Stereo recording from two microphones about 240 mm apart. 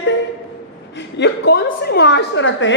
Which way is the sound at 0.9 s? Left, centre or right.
Left.